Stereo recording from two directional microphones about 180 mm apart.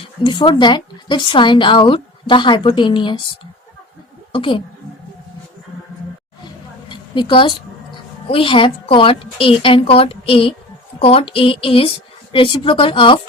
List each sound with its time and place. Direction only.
0.0 s a woman's voice: 25° left (ahead or behind)
4.3 s a woman's voice: 30° left (ahead or behind)
6.8 s a sound: 25° left (ahead or behind)
8.3 s a woman's voice: 30° left (ahead or behind)
11.0 s a sound: 35° left (ahead or behind)
12.3 s a woman's voice: 30° left (ahead or behind)